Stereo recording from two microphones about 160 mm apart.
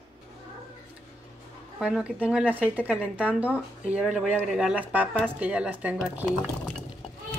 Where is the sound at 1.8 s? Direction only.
5° right (ahead or behind).